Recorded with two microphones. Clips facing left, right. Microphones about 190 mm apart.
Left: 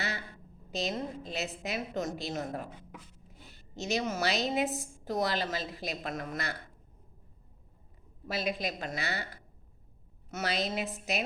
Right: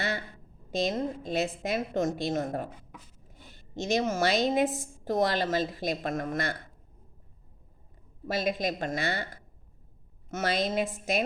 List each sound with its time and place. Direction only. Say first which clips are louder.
0.7 s a woman's voice: right 5 dB; 50° right (ahead or behind)
3.8 s a woman's voice: right 5 dB; 50° right (ahead or behind)
8.3 s a woman's voice: right 4 dB; 45° right (ahead or behind)
10.2 s a woman's voice: right 4 dB; 50° right (ahead or behind)